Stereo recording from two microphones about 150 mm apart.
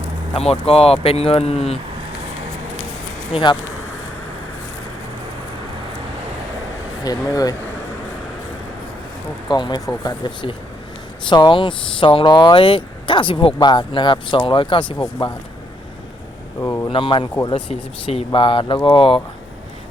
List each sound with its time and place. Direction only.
0.3 s speech: 40° left (ahead or behind)
3.3 s speech: 30° left (ahead or behind)
7.0 s speech: 25° left (ahead or behind)
9.5 s speech: 30° left (ahead or behind)
16.6 s speech: 20° left (ahead or behind)
16.9 s speech: 35° left (ahead or behind)